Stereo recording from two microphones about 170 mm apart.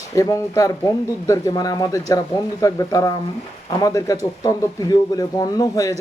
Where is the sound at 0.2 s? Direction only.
20° left (ahead or behind).